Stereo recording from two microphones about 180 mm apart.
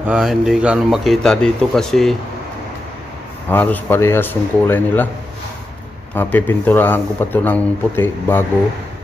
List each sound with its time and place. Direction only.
0.0 s a man's voice: 5° right (ahead or behind)
3.4 s speech: 10° left (ahead or behind)
6.1 s speech: 10° left (ahead or behind)